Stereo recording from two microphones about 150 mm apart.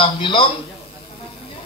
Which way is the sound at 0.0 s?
35° left (ahead or behind).